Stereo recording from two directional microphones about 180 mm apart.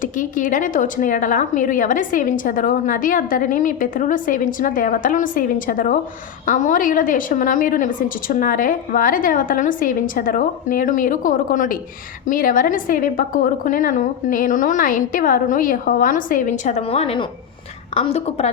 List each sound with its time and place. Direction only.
0.0 s a woman's voice: 45° left (ahead or behind)